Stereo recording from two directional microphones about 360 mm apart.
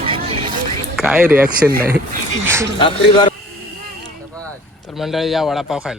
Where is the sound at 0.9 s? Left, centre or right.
Centre.